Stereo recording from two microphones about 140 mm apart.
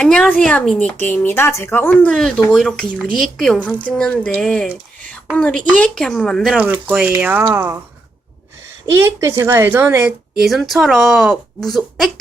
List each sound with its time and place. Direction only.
0.0 s a sound: 5° left (ahead or behind)
0.4 s speech: 5° left (ahead or behind)
6.6 s a woman's voice: 10° right (ahead or behind)
8.9 s a woman's voice: 20° right (ahead or behind); by 12.1 s centre (ahead or behind)